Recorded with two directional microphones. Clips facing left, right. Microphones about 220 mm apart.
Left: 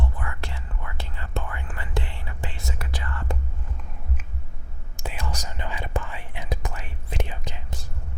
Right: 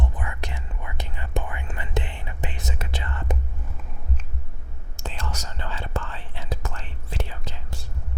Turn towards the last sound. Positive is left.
turn(degrees=15)  # may be behind; listen again after turning